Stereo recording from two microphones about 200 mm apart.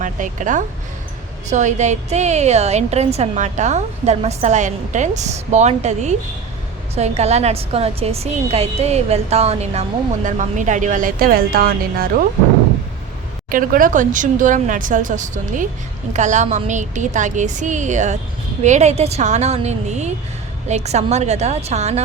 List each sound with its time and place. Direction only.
0.0 s a woman's voice: 40° right (ahead or behind)
13.5 s a woman's voice: 45° right (ahead or behind)